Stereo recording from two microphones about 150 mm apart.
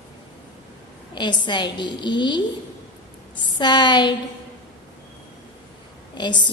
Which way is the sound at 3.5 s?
30° left (ahead or behind).